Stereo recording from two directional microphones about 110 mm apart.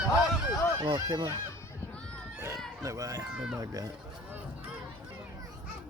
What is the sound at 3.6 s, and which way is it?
Speech, 35° right (ahead or behind).